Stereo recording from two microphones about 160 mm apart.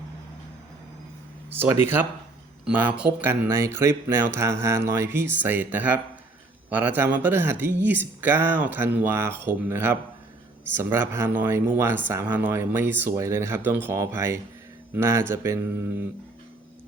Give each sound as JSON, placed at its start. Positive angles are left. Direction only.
{"t": 1.5, "sound": "speech", "side_deg": -15}